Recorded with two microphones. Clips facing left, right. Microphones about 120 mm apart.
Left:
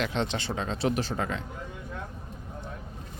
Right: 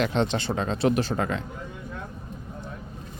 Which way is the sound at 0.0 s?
35° right (ahead or behind).